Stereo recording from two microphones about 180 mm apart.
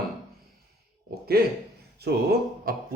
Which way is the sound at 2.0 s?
60° right (ahead or behind).